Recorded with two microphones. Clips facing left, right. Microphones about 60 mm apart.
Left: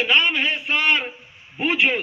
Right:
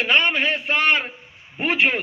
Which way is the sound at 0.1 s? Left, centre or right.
Right.